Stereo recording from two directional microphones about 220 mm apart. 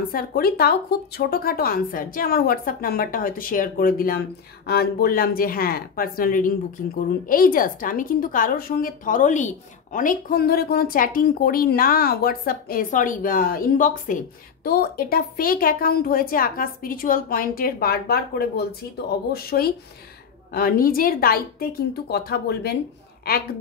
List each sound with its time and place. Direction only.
0.1 s a woman's voice: 45° left (ahead or behind)